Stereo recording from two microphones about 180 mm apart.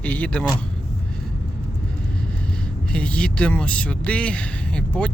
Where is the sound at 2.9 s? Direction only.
5° left (ahead or behind).